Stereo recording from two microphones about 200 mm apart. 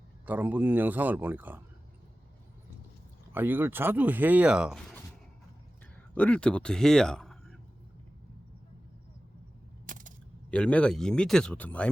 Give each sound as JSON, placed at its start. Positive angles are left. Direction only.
{"t": 0.3, "sound": "speech", "side_deg": -10}
{"t": 3.3, "sound": "speech", "side_deg": -10}
{"t": 6.1, "sound": "a man's voice", "side_deg": 5}
{"t": 9.8, "sound": "a sound", "side_deg": -40}
{"t": 10.5, "sound": "speech", "side_deg": 5}